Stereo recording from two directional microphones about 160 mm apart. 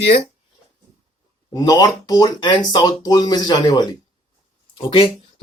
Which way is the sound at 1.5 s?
25° left (ahead or behind).